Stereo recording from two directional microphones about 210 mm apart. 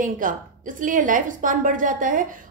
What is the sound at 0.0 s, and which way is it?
A woman's voice, 40° right (ahead or behind).